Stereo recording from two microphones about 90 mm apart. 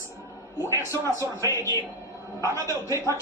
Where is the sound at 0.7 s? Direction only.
35° left (ahead or behind).